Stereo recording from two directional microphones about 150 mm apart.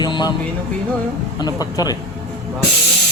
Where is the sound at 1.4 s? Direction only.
25° left (ahead or behind).